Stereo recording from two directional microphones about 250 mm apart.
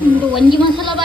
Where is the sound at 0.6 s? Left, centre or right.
Centre.